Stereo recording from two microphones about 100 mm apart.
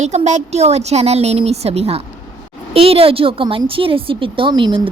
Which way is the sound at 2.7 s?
75° right (ahead or behind).